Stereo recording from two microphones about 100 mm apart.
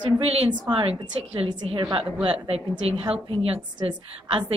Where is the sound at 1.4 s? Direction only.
55° right (ahead or behind).